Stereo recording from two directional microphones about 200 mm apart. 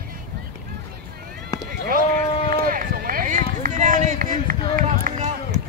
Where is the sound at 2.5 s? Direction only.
45° right (ahead or behind).